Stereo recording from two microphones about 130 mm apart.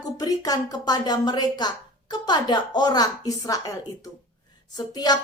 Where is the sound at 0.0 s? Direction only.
30° left (ahead or behind).